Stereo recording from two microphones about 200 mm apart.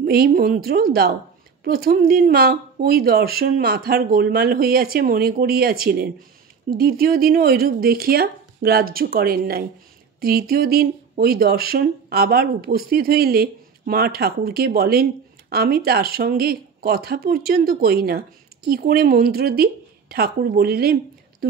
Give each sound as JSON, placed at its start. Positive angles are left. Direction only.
{"t": 0.0, "sound": "a woman's voice", "side_deg": -50}